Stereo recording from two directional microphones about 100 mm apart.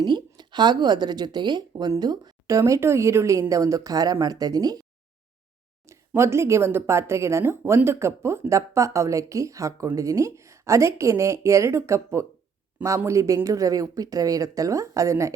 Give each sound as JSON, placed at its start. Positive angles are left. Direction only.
{"t": 0.0, "sound": "a woman's voice", "side_deg": -50}
{"t": 5.8, "sound": "a woman's voice", "side_deg": -30}